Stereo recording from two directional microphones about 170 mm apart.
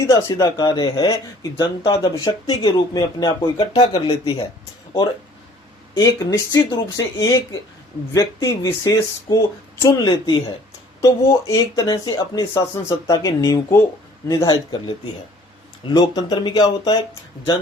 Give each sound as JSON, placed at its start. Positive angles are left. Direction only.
{"t": 0.1, "sound": "speech", "side_deg": 20}
{"t": 5.9, "sound": "speech", "side_deg": 20}